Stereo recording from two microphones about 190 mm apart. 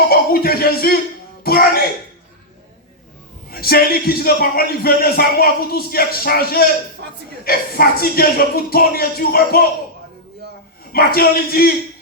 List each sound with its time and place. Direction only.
0.1 s a sound: 50° left (ahead or behind)
1.5 s speech: 55° left (ahead or behind)
3.5 s speech: 55° left (ahead or behind)
7.0 s a woman's voice: 55° right (ahead or behind)
7.4 s speech: 50° left (ahead or behind)
10.9 s speech: 50° left (ahead or behind)